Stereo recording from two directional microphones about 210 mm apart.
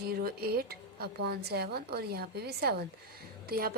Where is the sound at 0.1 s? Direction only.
45° right (ahead or behind).